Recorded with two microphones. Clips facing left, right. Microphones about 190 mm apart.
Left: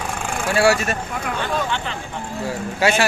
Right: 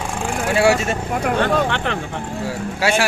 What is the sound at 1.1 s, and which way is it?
Speech, 60° right (ahead or behind).